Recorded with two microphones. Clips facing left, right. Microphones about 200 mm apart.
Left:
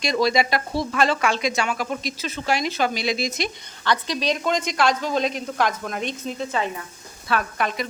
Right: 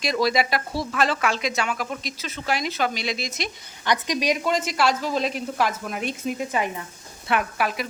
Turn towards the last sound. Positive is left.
turn(degrees=-5)  # may be behind; listen again after turning